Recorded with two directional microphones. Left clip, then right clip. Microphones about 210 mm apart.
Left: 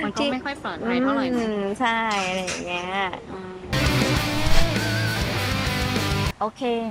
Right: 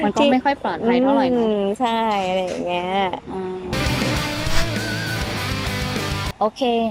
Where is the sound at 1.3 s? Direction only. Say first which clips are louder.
Right 6 dB; 15° right (ahead or behind).